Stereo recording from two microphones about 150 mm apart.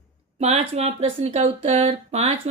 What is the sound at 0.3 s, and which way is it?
A woman's voice, 45° right (ahead or behind).